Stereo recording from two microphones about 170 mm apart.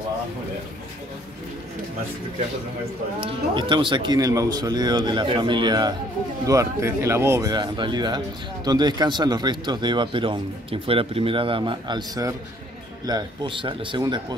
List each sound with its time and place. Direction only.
3.2 s speech: 30° right (ahead or behind)
7.5 s speech: 25° right (ahead or behind)